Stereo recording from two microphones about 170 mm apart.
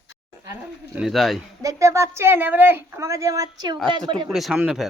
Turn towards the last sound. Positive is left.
turn(degrees=-5)  # may be behind; listen again after turning